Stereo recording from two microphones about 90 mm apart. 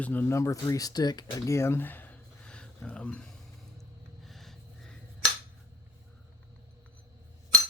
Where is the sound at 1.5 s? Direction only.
30° left (ahead or behind); by 3.3 s 15° left (ahead or behind).